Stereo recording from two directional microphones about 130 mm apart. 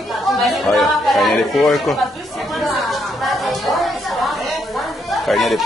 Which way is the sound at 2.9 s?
Centre (ahead or behind).